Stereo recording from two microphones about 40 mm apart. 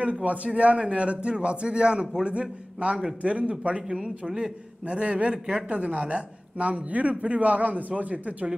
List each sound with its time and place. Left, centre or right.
0.0 s a man's voice: right